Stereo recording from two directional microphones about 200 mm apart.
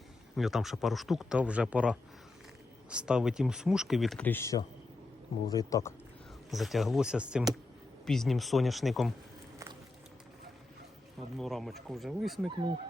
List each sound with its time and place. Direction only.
0.3 s speech: centre (ahead or behind); by 5.9 s 15° left (ahead or behind)
6.5 s speech: centre (ahead or behind)
11.3 s speech: centre (ahead or behind)